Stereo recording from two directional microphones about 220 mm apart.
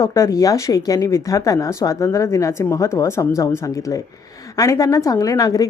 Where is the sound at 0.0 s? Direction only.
15° left (ahead or behind).